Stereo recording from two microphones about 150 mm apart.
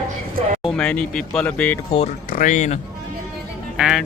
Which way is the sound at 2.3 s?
60° left (ahead or behind).